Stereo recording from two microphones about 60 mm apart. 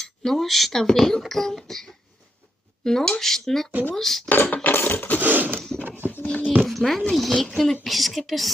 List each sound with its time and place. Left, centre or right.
0.0 s speech: centre
4.4 s mechanisms: left
5.2 s a sound: right
5.5 s a sound: centre
6.2 s speech: left
6.6 s speech: centre